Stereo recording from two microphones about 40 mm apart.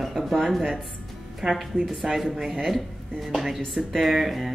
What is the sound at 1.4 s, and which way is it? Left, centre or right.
Speech, right.